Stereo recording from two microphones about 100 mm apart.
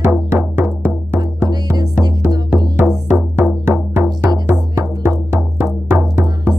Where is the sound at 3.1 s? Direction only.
10° right (ahead or behind); by 6.2 s 25° right (ahead or behind).